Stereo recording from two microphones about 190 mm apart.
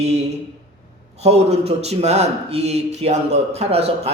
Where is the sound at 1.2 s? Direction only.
35° right (ahead or behind).